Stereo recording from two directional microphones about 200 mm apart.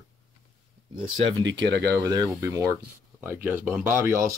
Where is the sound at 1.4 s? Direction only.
60° right (ahead or behind).